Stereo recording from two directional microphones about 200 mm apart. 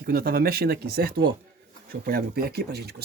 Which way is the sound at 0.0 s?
45° right (ahead or behind).